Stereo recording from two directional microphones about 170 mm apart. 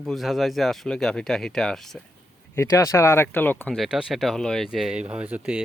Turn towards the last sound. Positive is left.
turn(degrees=-5)  # may be behind; listen again after turning